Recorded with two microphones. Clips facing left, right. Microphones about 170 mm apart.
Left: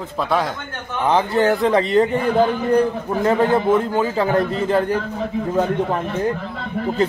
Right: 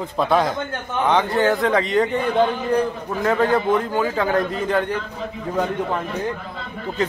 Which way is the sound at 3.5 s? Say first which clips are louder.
Left 2 dB; 25° left (ahead or behind).